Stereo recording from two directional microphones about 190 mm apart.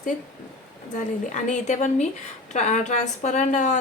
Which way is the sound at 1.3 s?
40° left (ahead or behind).